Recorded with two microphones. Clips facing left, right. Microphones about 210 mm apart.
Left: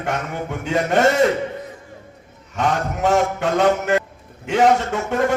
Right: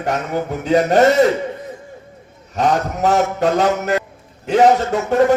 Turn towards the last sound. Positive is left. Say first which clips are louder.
# right 6 dB
turn(degrees=-35)  # may be behind; listen again after turning